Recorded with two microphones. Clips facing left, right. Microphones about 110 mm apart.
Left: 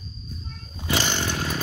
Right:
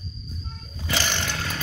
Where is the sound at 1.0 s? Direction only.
20° left (ahead or behind).